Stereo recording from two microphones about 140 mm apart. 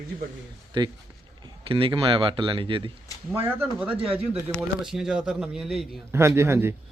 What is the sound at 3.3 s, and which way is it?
Speech, 15° right (ahead or behind).